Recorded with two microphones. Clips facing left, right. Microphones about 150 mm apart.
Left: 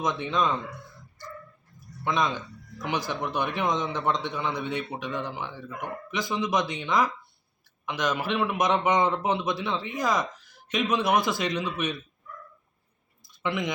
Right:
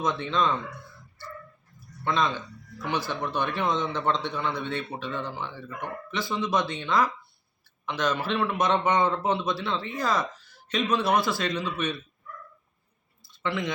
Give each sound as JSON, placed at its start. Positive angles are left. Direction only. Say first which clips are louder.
{"t": 0.0, "sound": "speech", "louder": "even", "side_deg": 15}
{"t": 2.0, "sound": "speech", "louder": "even", "side_deg": 15}
{"t": 13.2, "sound": "clicking", "louder": "even", "side_deg": 15}